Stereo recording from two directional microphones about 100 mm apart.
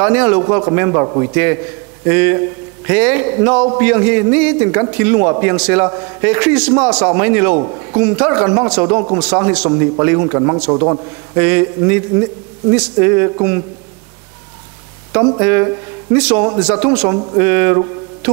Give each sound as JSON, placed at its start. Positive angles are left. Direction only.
{"t": 0.0, "sound": "a man's voice", "side_deg": -15}
{"t": 9.7, "sound": "a man's voice", "side_deg": -20}
{"t": 11.4, "sound": "a man's voice", "side_deg": -15}
{"t": 15.3, "sound": "a man's voice", "side_deg": -20}
{"t": 17.1, "sound": "a man's voice", "side_deg": -30}
{"t": 17.4, "sound": "speech", "side_deg": -15}